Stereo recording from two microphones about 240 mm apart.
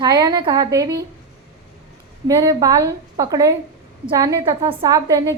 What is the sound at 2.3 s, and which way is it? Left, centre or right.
A woman's voice, centre.